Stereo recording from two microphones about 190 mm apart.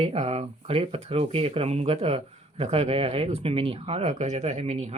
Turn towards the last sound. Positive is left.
turn(degrees=-35)  # may be behind; listen again after turning